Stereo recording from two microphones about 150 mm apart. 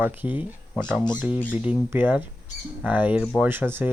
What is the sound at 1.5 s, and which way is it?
Speech, 10° right (ahead or behind).